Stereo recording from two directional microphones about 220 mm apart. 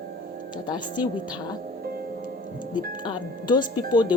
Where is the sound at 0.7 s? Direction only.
20° left (ahead or behind).